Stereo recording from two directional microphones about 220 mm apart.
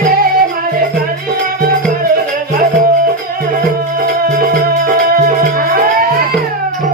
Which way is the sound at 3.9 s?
40° right (ahead or behind).